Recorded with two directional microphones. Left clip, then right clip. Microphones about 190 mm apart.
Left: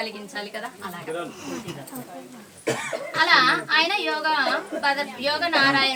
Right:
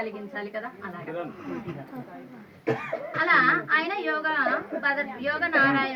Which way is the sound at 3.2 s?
40° left (ahead or behind).